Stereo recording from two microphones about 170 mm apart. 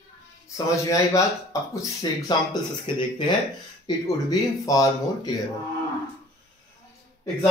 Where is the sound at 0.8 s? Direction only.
20° left (ahead or behind).